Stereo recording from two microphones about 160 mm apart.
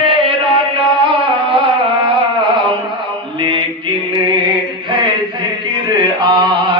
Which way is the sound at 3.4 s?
30° right (ahead or behind).